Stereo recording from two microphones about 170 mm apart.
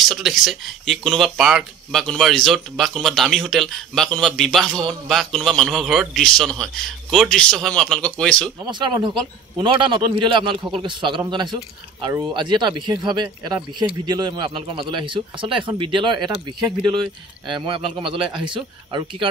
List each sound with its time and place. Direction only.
0.0 s speech: centre (ahead or behind)
8.6 s speech: 25° right (ahead or behind)